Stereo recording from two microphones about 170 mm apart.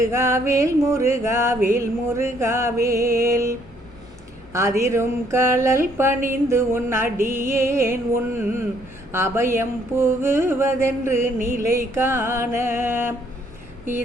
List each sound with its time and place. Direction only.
0.0 s mantra: 15° right (ahead or behind)
4.8 s mantra: 15° right (ahead or behind)